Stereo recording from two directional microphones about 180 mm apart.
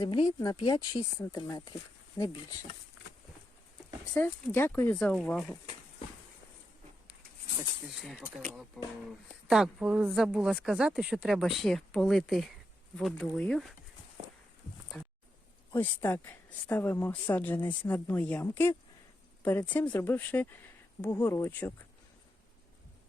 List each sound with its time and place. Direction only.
0.0 s speech: 25° left (ahead or behind)
4.1 s speech: 10° left (ahead or behind)
8.0 s speech: 5° right (ahead or behind)
15.7 s speech: 10° left (ahead or behind)